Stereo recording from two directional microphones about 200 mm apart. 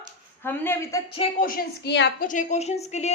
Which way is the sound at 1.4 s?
45° left (ahead or behind).